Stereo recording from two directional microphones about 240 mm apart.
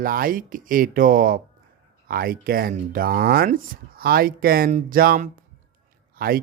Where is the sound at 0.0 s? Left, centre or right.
Right.